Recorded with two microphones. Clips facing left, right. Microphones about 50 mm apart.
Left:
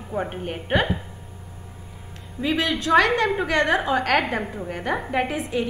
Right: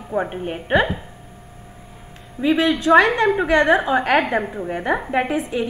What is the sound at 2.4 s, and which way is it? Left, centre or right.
A woman's voice, right.